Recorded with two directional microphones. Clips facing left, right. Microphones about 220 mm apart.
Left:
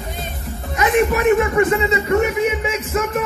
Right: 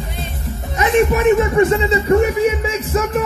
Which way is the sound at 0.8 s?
25° right (ahead or behind).